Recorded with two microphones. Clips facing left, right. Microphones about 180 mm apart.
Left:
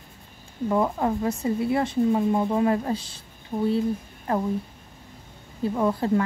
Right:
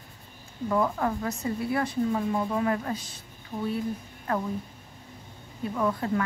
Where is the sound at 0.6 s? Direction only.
20° left (ahead or behind).